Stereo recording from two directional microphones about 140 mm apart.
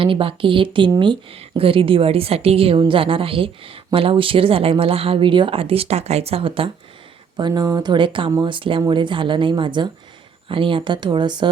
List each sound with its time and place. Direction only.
0.0 s speech: 40° right (ahead or behind)
7.3 s speech: 30° right (ahead or behind)